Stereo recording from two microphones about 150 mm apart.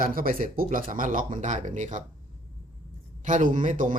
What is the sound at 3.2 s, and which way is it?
Speech, 55° right (ahead or behind).